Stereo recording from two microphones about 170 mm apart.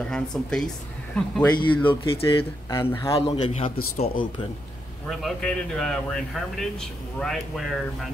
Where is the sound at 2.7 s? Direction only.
15° left (ahead or behind).